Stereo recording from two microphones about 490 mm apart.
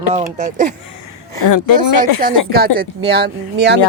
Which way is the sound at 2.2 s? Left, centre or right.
Centre.